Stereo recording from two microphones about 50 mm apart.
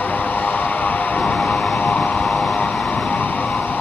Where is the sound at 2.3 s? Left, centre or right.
Centre.